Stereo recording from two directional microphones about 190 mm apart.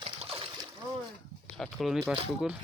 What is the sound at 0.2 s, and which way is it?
Splash, 30° right (ahead or behind).